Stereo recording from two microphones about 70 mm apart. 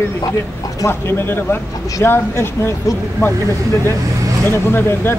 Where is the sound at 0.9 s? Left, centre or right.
Left.